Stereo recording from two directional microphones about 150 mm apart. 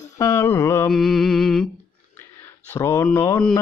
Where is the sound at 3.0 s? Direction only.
15° left (ahead or behind).